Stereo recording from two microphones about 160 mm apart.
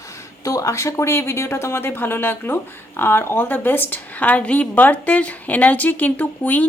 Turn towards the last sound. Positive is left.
turn(degrees=10)  # may be behind; listen again after turning